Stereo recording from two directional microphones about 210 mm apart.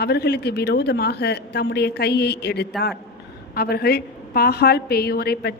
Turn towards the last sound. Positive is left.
turn(degrees=50)  # may be behind; listen again after turning